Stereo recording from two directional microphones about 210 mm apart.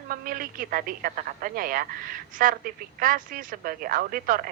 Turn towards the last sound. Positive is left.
turn(degrees=-40)  # may be behind; listen again after turning